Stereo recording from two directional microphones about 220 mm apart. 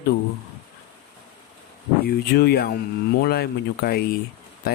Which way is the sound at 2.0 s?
45° left (ahead or behind).